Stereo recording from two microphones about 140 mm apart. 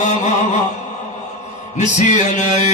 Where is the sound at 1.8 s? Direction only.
60° left (ahead or behind).